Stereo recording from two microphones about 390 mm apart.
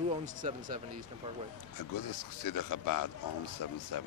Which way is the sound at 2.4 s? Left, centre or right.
Left.